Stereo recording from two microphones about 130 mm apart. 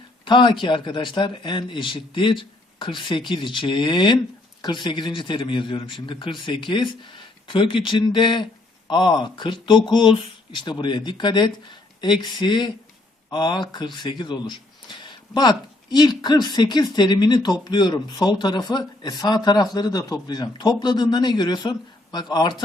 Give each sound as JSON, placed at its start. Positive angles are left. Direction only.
{"t": 0.3, "sound": "speech", "side_deg": 40}